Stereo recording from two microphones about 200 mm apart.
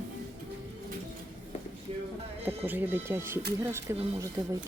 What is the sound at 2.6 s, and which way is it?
Speech, 10° right (ahead or behind).